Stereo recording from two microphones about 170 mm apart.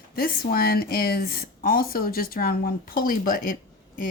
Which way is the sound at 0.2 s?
60° left (ahead or behind).